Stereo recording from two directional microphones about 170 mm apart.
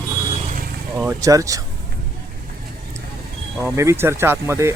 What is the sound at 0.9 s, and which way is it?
Speech, 15° right (ahead or behind).